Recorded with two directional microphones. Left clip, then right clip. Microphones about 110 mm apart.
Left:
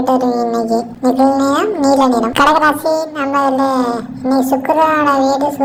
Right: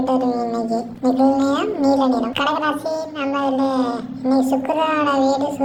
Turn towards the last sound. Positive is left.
turn(degrees=20)  # may be behind; listen again after turning